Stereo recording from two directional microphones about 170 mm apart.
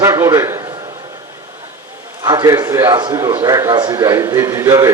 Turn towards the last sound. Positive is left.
turn(degrees=-20)  # may be behind; listen again after turning